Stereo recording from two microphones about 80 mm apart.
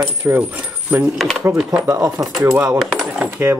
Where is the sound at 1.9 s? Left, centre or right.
Right.